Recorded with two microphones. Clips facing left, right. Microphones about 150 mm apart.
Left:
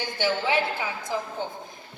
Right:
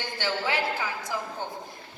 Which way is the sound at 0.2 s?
20° left (ahead or behind).